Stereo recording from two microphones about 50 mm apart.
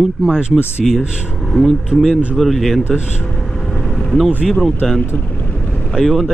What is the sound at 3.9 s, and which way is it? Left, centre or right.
Vehicle, centre.